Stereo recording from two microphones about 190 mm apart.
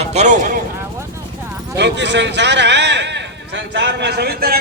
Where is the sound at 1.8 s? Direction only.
65° right (ahead or behind).